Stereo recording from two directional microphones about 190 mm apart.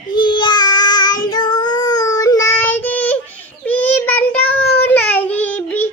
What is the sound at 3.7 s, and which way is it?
Child singing, 10° left (ahead or behind).